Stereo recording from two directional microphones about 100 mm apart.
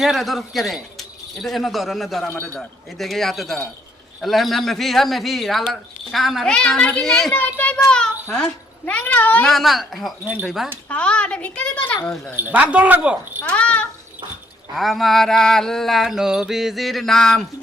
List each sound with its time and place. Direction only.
0.0 s mantra: centre (ahead or behind)
2.3 s a woman's voice: 20° left (ahead or behind)
2.6 s mantra: centre (ahead or behind)
7.3 s a woman's voice: 15° left (ahead or behind)
9.5 s mantra: centre (ahead or behind)
10.8 s a woman's voice: 10° left (ahead or behind)
12.4 s speech: 15° right (ahead or behind)
13.4 s a woman's voice: 10° left (ahead or behind)
14.8 s mantra: centre (ahead or behind)